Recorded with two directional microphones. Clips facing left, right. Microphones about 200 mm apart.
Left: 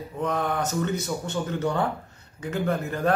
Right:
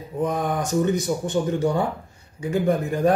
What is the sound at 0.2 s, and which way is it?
A man's voice, 10° right (ahead or behind).